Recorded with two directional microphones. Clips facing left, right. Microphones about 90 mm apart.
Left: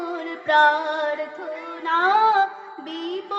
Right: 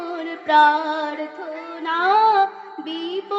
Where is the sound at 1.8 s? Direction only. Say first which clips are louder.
Right 2 dB; 35° left (ahead or behind).